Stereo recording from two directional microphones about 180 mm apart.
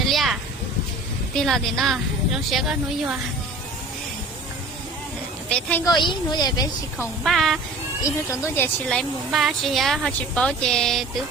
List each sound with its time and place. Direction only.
0.0 s a sound: centre (ahead or behind)
1.4 s speech: centre (ahead or behind)
5.5 s a woman's voice: 5° left (ahead or behind)
5.8 s a woman's voice: 25° left (ahead or behind)
7.3 s speech: centre (ahead or behind)
8.3 s speech: 15° left (ahead or behind)